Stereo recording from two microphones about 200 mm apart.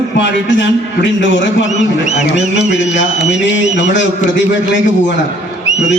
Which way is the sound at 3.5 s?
65° left (ahead or behind).